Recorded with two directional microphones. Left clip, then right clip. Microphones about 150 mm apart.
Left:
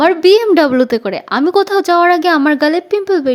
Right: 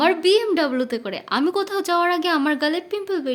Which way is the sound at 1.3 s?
45° left (ahead or behind).